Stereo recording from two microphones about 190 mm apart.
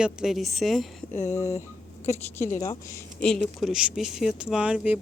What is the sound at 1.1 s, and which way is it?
Speech, 40° left (ahead or behind).